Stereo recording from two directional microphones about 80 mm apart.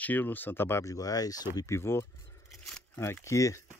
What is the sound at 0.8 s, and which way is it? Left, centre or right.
Speech, left.